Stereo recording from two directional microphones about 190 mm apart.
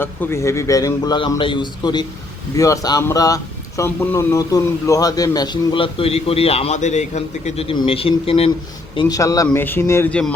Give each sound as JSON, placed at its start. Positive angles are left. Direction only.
{"t": 0.0, "sound": "speech", "side_deg": 15}
{"t": 9.0, "sound": "speech", "side_deg": 20}